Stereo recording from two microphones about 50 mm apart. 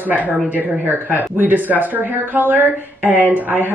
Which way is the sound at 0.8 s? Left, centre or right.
Right.